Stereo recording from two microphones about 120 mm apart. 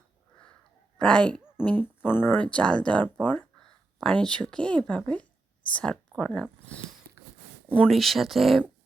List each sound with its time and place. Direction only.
0.9 s speech: 5° left (ahead or behind)